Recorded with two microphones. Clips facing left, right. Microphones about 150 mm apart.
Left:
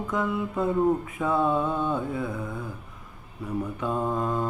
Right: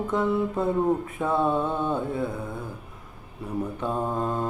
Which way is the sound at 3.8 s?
20° right (ahead or behind).